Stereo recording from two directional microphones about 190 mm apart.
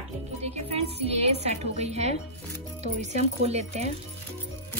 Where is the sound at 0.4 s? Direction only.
35° right (ahead or behind).